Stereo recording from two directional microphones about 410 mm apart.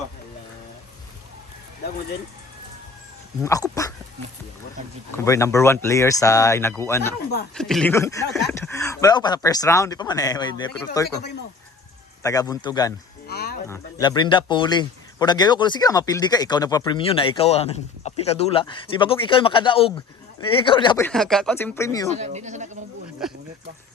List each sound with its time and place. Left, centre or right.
3.4 s speech: centre
5.1 s speech: centre
12.2 s speech: centre
13.2 s a sound: left
13.7 s speech: centre
22.1 s speech: centre
23.2 s speech: centre